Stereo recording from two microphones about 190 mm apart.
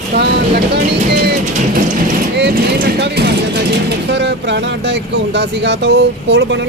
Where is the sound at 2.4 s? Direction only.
60° right (ahead or behind).